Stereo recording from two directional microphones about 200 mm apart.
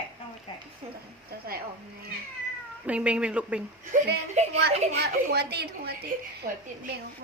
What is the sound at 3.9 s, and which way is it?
Speech, 35° right (ahead or behind).